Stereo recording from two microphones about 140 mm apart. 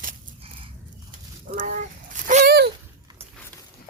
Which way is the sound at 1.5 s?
65° right (ahead or behind).